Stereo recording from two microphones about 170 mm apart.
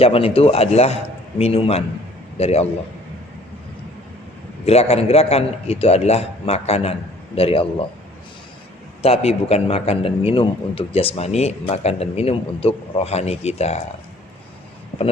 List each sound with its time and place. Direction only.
0.0 s a man's voice: 35° left (ahead or behind)
4.6 s a man's voice: 35° left (ahead or behind)
9.0 s a man's voice: 35° left (ahead or behind)